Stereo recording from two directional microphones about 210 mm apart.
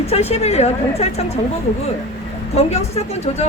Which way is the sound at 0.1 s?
30° left (ahead or behind).